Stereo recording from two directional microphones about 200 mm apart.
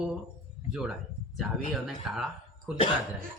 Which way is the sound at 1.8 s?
Centre (ahead or behind).